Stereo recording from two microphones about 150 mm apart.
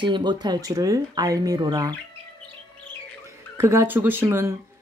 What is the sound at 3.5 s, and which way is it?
Speech, 15° right (ahead or behind).